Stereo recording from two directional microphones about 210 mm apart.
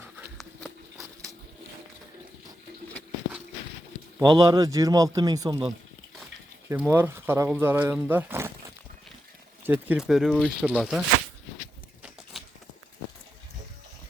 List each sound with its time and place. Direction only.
4.2 s speech: 20° right (ahead or behind)
6.7 s speech: 10° right (ahead or behind)
9.6 s speech: 10° right (ahead or behind)